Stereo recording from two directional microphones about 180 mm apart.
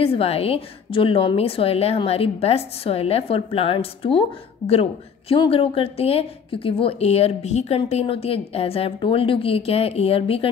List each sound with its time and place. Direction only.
0.0 s a woman's voice: 30° left (ahead or behind)